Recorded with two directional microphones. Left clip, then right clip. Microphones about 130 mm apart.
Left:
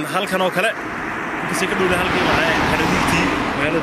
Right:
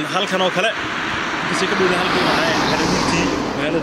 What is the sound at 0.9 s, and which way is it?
Vehicle, 40° right (ahead or behind).